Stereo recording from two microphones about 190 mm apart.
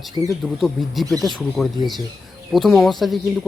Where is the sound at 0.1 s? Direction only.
20° right (ahead or behind).